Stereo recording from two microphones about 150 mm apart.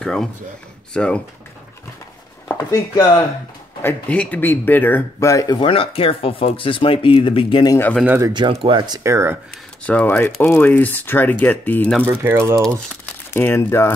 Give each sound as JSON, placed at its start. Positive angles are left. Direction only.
{"t": 0.0, "sound": "speech", "side_deg": 5}
{"t": 2.4, "sound": "speech", "side_deg": 25}
{"t": 3.8, "sound": "speech", "side_deg": 10}
{"t": 5.6, "sound": "speech", "side_deg": 35}
{"t": 8.0, "sound": "speech", "side_deg": -10}
{"t": 8.3, "sound": "speech", "side_deg": -30}
{"t": 9.8, "sound": "speech", "side_deg": 10}
{"t": 12.0, "sound": "speech", "side_deg": -15}
{"t": 13.0, "sound": "speech", "side_deg": 15}